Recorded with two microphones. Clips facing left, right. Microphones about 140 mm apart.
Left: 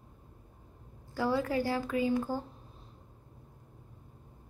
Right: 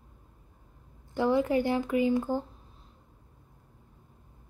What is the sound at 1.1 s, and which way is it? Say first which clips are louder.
A woman's voice: right 5 dB; 20° right (ahead or behind).